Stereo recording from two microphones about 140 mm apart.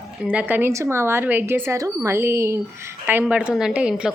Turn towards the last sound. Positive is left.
turn(degrees=-5)  # may be behind; listen again after turning